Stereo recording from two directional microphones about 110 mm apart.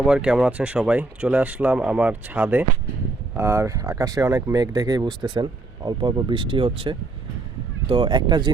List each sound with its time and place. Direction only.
0.0 s speech: 10° right (ahead or behind)
3.3 s speech: 25° right (ahead or behind); by 8.5 s 45° right (ahead or behind)